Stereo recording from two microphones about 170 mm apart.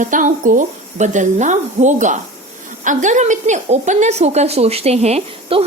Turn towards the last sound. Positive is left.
turn(degrees=-35)  # may be behind; listen again after turning